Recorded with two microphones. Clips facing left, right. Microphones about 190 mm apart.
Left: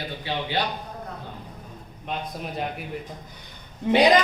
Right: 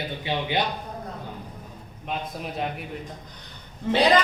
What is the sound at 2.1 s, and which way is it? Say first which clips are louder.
Speech: even; centre (ahead or behind).